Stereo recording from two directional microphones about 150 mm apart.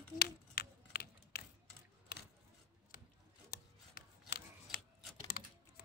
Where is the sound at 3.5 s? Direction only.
85° left.